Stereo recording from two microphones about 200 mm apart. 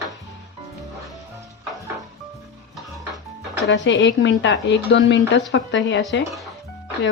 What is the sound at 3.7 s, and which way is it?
A woman's voice, 65° left (ahead or behind).